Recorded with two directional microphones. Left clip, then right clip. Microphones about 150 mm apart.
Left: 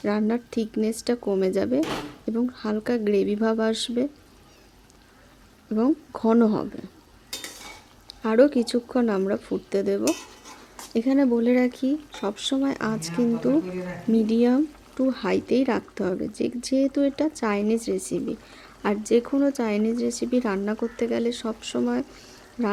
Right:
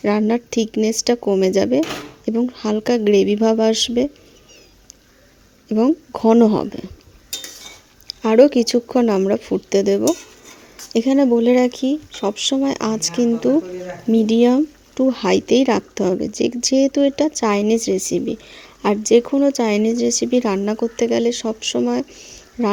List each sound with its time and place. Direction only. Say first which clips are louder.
0.0 s speech: right 7 dB; 40° right (ahead or behind)
5.6 s speech: right 6 dB; 35° right (ahead or behind)
8.0 s speech: right 7 dB; 35° right (ahead or behind)